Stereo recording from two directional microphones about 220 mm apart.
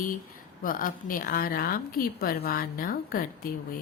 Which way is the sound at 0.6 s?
40° left (ahead or behind).